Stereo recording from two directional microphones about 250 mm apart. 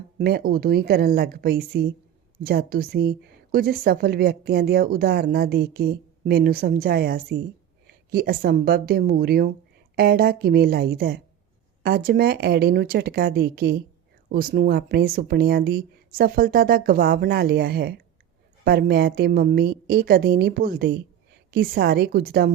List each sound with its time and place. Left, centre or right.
0.2 s speech: right